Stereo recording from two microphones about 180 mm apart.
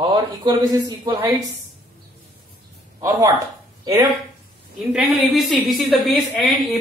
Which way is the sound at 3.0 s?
20° right (ahead or behind).